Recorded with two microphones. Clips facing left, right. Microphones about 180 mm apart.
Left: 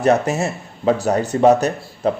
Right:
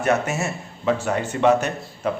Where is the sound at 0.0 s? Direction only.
35° left (ahead or behind).